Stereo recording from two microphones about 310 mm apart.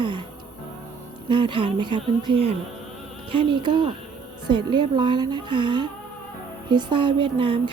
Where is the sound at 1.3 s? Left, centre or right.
Centre.